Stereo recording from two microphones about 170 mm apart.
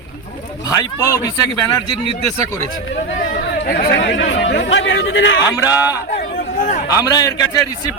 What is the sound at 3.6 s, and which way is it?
Speech, 65° left (ahead or behind).